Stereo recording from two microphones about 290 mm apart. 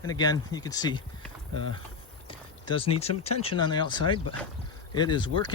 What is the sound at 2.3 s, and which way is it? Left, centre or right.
Speech, centre.